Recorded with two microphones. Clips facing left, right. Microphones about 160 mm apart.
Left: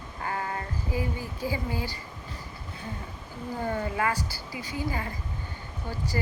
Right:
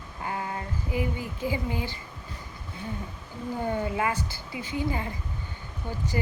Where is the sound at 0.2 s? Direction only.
15° right (ahead or behind).